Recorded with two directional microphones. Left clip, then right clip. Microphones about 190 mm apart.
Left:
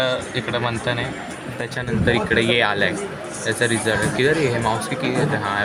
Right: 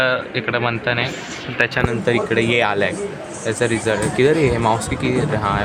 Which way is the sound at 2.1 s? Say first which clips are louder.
Left 2 dB; 15° right (ahead or behind).